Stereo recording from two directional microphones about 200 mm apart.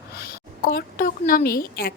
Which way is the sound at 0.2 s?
50° left (ahead or behind).